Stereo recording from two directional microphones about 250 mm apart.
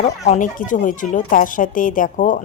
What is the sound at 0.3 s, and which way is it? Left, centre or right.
A woman's voice, left.